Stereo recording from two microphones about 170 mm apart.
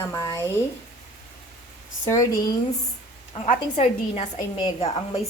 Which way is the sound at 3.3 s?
40° left (ahead or behind).